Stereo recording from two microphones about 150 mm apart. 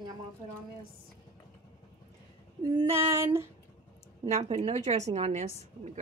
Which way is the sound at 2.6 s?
35° right (ahead or behind).